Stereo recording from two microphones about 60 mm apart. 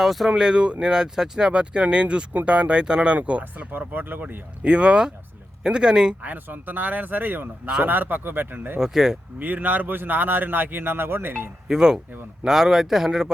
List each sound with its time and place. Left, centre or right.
0.0 s speech: centre
0.3 s speech: centre
3.6 s speech: right
4.6 s speech: centre
6.2 s speech: right
8.8 s speech: centre
9.4 s speech: right
11.7 s speech: centre